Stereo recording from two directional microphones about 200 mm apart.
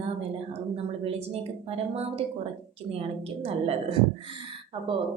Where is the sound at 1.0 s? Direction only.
30° right (ahead or behind).